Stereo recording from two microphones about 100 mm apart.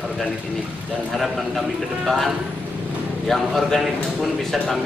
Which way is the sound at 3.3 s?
Centre (ahead or behind).